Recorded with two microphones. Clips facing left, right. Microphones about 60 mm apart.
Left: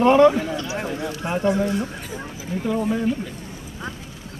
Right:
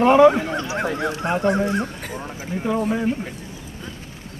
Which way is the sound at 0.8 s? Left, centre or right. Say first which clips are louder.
Right 4 dB; right.